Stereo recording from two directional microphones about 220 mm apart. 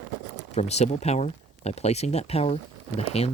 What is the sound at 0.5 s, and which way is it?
Speech, 30° left (ahead or behind).